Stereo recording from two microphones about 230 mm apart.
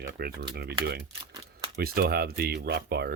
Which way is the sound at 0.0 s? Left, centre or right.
Right.